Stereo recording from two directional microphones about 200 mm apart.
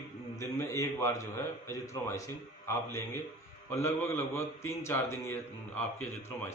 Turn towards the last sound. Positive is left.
turn(degrees=10)  # may be behind; listen again after turning